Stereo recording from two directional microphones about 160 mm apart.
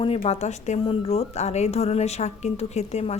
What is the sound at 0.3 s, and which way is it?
A woman's voice, 45° left (ahead or behind).